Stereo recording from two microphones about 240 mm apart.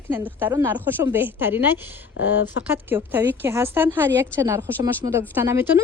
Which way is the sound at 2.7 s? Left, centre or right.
Centre.